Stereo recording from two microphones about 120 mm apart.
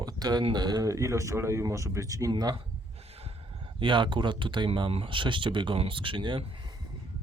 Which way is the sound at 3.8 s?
40° right (ahead or behind).